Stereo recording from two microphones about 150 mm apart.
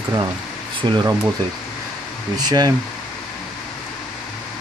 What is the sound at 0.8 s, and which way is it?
Speech, 30° right (ahead or behind).